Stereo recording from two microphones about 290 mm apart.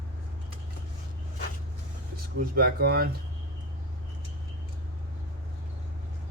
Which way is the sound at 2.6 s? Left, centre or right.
Right.